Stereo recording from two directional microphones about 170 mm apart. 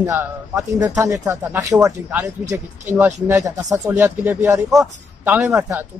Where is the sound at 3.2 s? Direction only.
20° right (ahead or behind).